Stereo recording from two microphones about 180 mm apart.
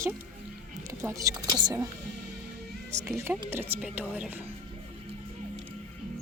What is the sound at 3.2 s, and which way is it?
Speech, 15° right (ahead or behind).